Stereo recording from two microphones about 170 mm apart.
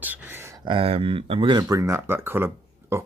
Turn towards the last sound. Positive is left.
turn(degrees=-15)  # may be behind; listen again after turning